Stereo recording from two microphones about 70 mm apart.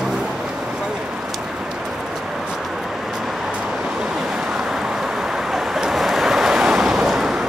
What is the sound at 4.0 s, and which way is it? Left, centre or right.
Vehicle, centre.